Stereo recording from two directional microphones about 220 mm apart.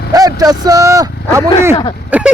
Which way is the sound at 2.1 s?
5° right (ahead or behind).